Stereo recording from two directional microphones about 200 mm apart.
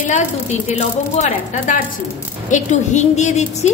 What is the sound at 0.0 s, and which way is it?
A woman's voice, 35° left (ahead or behind).